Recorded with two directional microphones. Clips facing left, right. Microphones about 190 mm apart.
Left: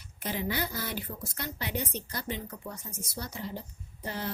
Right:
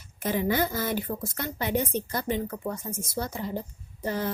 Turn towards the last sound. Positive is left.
turn(degrees=-45)  # may be behind; listen again after turning